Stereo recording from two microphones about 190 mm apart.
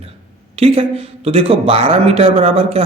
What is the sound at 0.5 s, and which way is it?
Speech, 30° right (ahead or behind).